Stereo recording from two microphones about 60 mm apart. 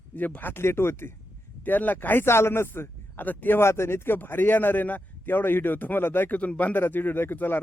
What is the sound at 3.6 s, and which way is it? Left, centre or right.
A man's voice, left.